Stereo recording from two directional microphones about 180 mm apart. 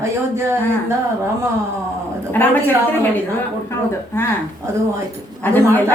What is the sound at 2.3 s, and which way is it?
Speech, 10° left (ahead or behind).